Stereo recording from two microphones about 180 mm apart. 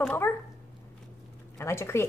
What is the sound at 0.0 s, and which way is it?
Speech, 10° left (ahead or behind).